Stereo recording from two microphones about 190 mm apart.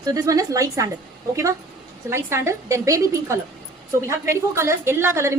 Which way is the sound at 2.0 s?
15° right (ahead or behind).